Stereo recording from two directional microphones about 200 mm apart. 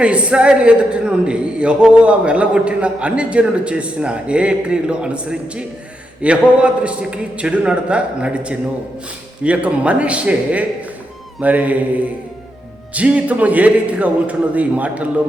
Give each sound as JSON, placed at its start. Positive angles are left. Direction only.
{"t": 0.0, "sound": "a man's voice", "side_deg": -5}